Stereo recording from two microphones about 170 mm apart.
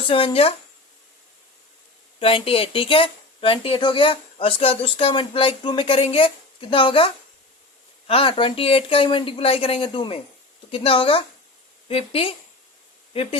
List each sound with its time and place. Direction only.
0.1 s speech: 35° left (ahead or behind)
2.1 s speech: 35° left (ahead or behind)